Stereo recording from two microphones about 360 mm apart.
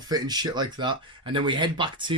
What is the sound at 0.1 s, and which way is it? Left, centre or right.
Speech, centre.